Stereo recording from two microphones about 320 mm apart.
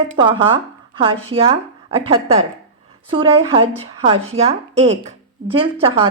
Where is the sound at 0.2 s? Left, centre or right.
Centre.